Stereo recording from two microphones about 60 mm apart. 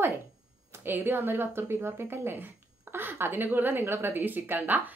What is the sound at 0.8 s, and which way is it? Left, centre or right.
Speech, right.